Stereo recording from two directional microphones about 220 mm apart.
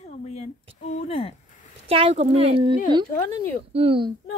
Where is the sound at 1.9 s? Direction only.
25° right (ahead or behind).